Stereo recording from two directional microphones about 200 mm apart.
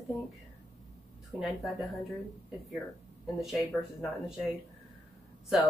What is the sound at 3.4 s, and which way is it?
Speech, centre (ahead or behind).